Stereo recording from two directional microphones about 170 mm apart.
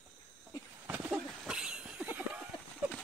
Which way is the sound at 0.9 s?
5° right (ahead or behind).